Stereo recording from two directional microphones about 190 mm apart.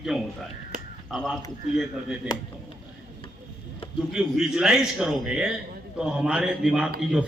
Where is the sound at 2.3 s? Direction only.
20° left (ahead or behind).